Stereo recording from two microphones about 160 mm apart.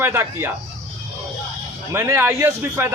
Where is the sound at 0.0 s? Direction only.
15° right (ahead or behind).